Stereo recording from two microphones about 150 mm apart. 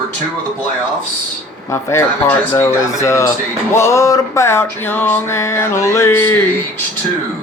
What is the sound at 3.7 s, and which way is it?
Music, 20° left (ahead or behind).